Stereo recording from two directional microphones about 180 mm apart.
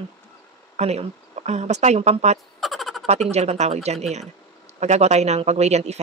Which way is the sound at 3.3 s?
35° right (ahead or behind).